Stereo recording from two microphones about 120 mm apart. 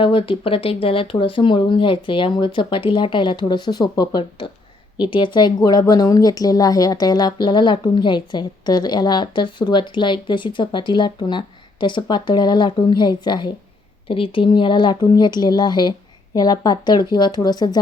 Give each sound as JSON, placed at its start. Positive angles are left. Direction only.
{"t": 0.0, "sound": "speech", "side_deg": 45}